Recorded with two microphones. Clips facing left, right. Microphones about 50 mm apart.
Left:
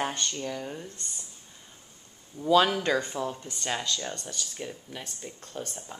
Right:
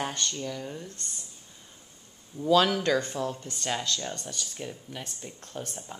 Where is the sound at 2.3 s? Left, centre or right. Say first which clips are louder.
Even; centre.